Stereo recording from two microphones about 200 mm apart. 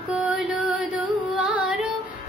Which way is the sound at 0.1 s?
5° right (ahead or behind).